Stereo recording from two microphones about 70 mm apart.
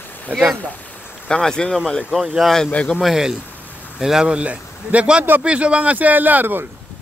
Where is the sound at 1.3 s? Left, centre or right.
Centre.